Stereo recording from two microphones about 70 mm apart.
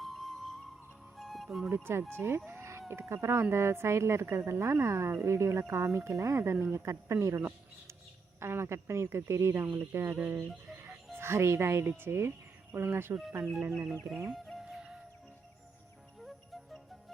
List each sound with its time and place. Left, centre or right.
0.0 s music: centre
1.7 s a woman's voice: right
2.5 s chicken: right
3.1 s a woman's voice: right
13.7 s speech: centre
14.6 s music: centre
16.2 s music: centre